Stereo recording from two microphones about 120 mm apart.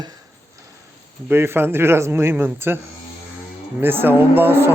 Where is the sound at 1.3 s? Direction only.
20° right (ahead or behind).